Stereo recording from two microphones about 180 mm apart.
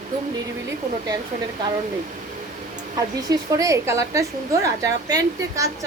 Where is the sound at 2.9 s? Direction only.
20° right (ahead or behind).